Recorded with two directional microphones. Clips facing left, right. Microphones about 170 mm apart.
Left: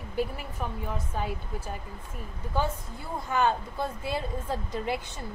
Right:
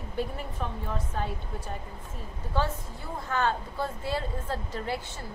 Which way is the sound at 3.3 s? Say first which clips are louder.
Left 2 dB; 15° left (ahead or behind).